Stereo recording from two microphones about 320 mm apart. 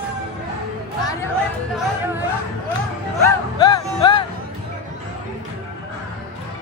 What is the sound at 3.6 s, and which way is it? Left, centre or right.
Music, centre.